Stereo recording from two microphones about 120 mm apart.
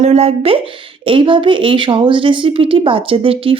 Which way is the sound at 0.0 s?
65° right (ahead or behind).